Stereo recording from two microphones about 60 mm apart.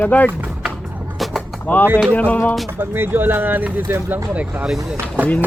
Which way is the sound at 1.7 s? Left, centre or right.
Left.